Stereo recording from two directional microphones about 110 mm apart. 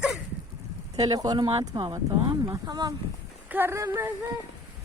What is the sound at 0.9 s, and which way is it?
Speech, 35° right (ahead or behind).